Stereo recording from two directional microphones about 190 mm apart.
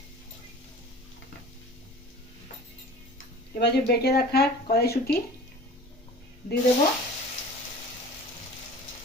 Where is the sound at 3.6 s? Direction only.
60° left (ahead or behind).